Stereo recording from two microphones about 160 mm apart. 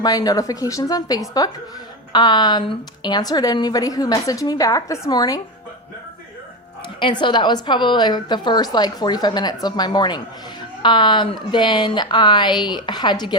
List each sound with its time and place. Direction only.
0.0 s a woman's voice: 25° left (ahead or behind)
7.0 s a woman's voice: 30° left (ahead or behind)